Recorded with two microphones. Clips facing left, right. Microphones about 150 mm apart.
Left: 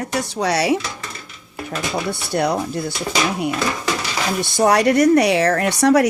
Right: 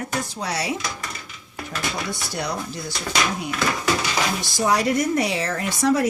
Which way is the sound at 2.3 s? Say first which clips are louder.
Left 8 dB; 60° left (ahead or behind).